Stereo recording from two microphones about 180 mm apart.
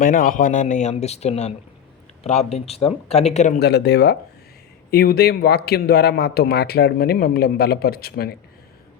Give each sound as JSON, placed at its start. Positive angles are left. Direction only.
{"t": 0.0, "sound": "speech", "side_deg": 50}
{"t": 3.6, "sound": "a man's voice", "side_deg": 65}